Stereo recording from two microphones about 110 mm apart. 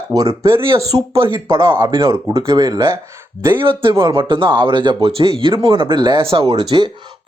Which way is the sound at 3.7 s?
50° right (ahead or behind).